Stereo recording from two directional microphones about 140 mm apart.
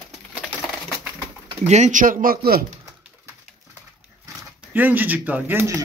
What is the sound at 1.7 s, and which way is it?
Speech, 60° right (ahead or behind).